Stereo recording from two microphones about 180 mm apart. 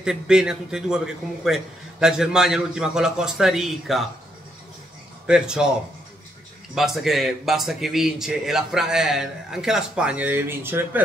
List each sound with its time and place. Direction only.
0.0 s a man's voice: 5° right (ahead or behind)
5.2 s a man's voice: 5° right (ahead or behind)
6.7 s a man's voice: centre (ahead or behind)